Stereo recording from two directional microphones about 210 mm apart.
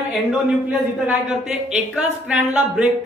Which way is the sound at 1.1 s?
5° right (ahead or behind).